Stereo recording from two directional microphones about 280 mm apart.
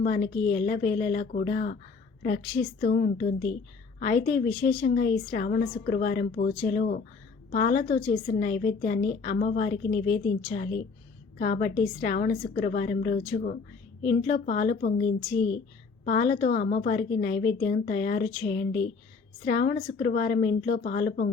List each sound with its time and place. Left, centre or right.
0.0 s a woman's voice: left
16.0 s a woman's voice: left